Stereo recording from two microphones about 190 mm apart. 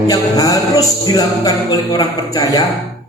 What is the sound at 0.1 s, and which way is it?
A man's voice, 20° left (ahead or behind).